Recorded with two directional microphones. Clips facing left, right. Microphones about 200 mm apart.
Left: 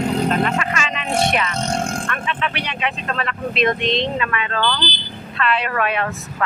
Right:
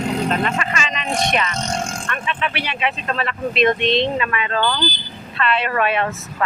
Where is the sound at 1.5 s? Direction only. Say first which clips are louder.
Left 2 dB; 60° left (ahead or behind).